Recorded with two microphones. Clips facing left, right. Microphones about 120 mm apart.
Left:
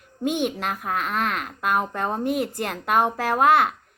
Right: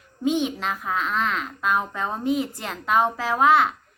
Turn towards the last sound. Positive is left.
turn(degrees=55)  # may be behind; listen again after turning